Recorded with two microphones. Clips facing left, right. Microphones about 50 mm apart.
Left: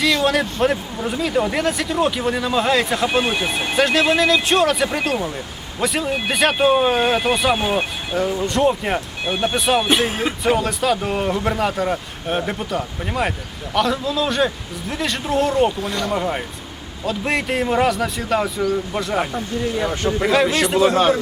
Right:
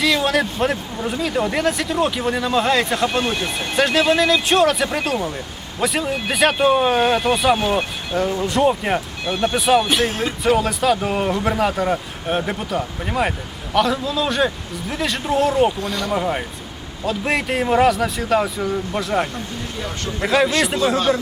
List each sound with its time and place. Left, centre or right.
0.0 s speech: centre
9.2 s speech: centre
9.6 s speech: centre
9.8 s speech: centre